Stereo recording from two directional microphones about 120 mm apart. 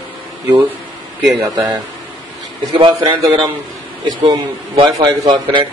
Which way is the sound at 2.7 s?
50° right (ahead or behind).